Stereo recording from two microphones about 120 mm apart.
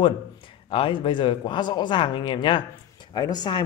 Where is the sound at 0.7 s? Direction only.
45° left (ahead or behind).